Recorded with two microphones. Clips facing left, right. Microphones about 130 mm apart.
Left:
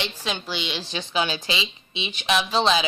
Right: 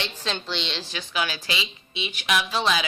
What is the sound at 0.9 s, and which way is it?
Speech, 25° left (ahead or behind).